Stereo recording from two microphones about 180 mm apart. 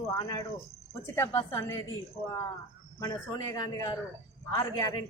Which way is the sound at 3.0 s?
20° left (ahead or behind).